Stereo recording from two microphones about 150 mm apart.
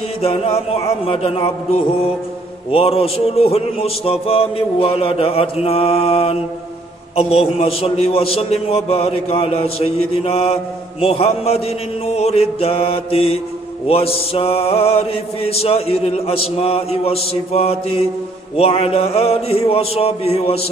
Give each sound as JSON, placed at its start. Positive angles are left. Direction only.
{"t": 0.2, "sound": "a man's voice", "side_deg": 40}